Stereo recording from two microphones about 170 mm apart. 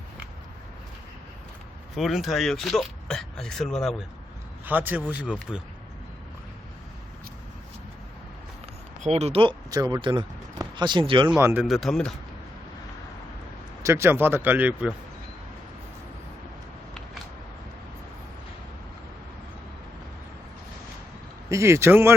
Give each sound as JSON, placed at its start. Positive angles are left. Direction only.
{"t": 2.0, "sound": "speech", "side_deg": 0}
{"t": 4.6, "sound": "speech", "side_deg": -10}
{"t": 5.5, "sound": "speech", "side_deg": 10}
{"t": 9.0, "sound": "speech", "side_deg": -40}
{"t": 11.3, "sound": "speech", "side_deg": -10}
{"t": 11.6, "sound": "speech", "side_deg": 0}
{"t": 13.8, "sound": "speech", "side_deg": -15}
{"t": 21.5, "sound": "speech", "side_deg": -15}